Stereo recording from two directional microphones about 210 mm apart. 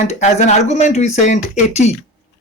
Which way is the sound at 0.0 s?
35° left (ahead or behind).